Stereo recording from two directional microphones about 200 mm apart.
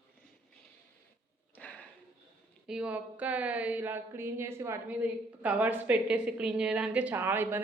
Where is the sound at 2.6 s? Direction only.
5° right (ahead or behind).